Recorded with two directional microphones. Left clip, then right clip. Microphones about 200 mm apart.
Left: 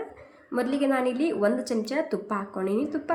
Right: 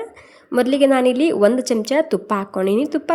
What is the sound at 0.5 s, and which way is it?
A woman's voice, 45° right (ahead or behind).